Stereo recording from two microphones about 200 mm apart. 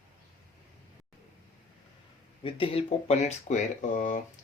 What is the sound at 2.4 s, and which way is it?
Speech, 25° left (ahead or behind).